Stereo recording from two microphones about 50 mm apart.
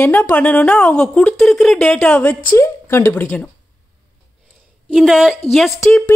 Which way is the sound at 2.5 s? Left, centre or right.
Left.